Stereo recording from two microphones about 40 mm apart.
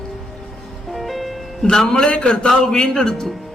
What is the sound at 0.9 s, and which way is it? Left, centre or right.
Music, centre.